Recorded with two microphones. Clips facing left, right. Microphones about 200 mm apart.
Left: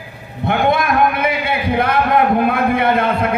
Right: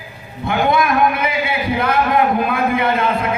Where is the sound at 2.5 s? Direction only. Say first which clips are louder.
Left 2 dB; 60° left (ahead or behind).